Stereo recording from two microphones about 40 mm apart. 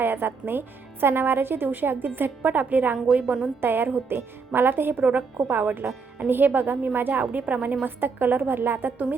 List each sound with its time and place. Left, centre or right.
0.0 s a woman's voice: right
3.6 s a woman's voice: right
3.8 s a woman's voice: right
7.9 s a woman's voice: right